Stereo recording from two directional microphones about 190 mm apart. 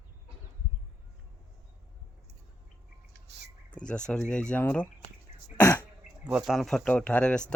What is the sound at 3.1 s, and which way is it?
Bird, 65° right (ahead or behind).